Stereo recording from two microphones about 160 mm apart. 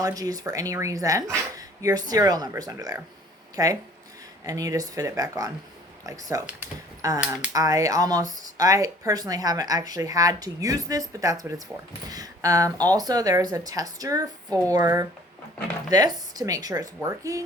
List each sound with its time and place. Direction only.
0.0 s speech: 20° right (ahead or behind)